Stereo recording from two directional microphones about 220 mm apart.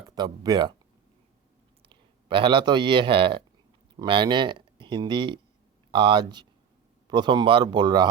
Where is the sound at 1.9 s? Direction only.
20° right (ahead or behind).